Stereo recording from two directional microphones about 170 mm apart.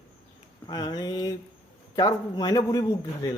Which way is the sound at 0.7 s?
25° left (ahead or behind).